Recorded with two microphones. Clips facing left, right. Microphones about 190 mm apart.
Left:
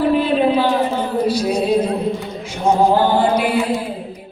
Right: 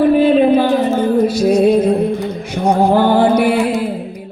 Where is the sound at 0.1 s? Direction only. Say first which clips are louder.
Right 5 dB; 50° right (ahead or behind).